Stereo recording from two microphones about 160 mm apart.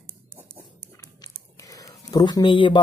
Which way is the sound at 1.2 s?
20° left (ahead or behind).